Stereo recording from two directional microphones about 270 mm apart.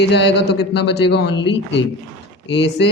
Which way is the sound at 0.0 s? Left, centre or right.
Left.